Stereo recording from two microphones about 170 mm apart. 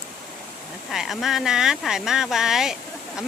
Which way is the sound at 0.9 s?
Centre (ahead or behind).